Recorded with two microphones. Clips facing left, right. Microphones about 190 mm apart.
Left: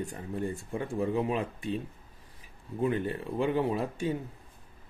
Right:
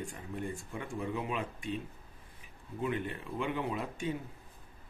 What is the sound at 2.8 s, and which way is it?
Speech, 35° left (ahead or behind).